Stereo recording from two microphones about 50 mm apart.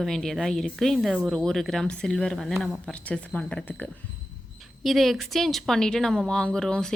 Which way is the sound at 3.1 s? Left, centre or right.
Left.